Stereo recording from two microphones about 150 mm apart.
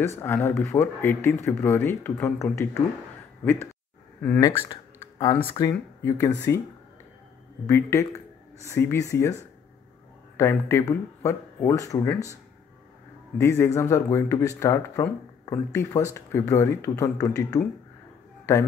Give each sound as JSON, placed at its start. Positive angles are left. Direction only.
{"t": 0.0, "sound": "speech", "side_deg": 15}
{"t": 4.4, "sound": "speech", "side_deg": 30}
{"t": 5.0, "sound": "computer keyboard", "side_deg": 20}
{"t": 5.6, "sound": "speech", "side_deg": 25}
{"t": 7.6, "sound": "speech", "side_deg": 20}
{"t": 13.4, "sound": "speech", "side_deg": 20}